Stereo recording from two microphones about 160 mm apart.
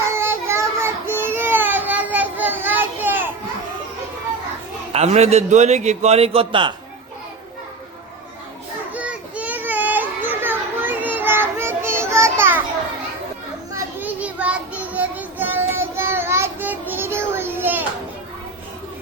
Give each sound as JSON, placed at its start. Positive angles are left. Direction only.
{"t": 0.0, "sound": "child singing", "side_deg": -15}
{"t": 4.9, "sound": "a man's voice", "side_deg": -40}
{"t": 8.9, "sound": "children playing", "side_deg": -10}
{"t": 13.7, "sound": "child singing", "side_deg": -10}